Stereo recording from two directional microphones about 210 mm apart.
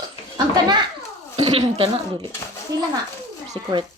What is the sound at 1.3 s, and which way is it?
Speech, 25° right (ahead or behind).